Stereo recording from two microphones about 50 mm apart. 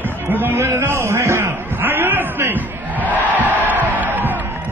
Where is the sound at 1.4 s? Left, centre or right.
Right.